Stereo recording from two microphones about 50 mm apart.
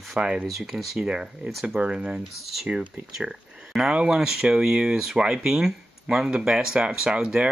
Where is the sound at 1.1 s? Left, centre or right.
Right.